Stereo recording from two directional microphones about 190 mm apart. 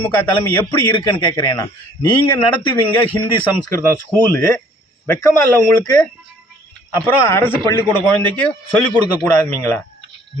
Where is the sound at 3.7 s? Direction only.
10° left (ahead or behind).